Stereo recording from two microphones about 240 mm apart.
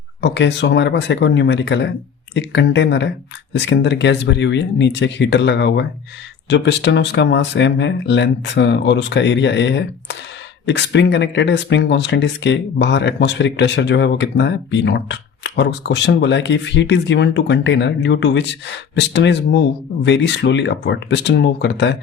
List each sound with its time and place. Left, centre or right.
0.2 s speech: left